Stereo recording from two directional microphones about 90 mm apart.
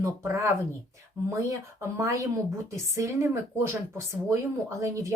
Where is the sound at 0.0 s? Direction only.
35° right (ahead or behind).